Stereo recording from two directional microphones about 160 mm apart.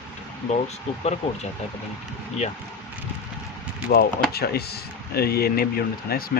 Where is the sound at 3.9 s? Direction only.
75° left (ahead or behind).